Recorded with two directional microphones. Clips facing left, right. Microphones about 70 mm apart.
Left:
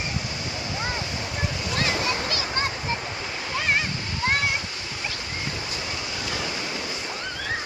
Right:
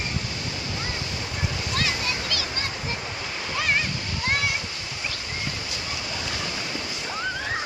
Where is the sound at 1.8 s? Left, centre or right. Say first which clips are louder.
Left 5 dB; left.